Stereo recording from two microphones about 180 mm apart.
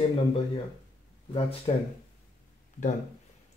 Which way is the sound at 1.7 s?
30° left (ahead or behind).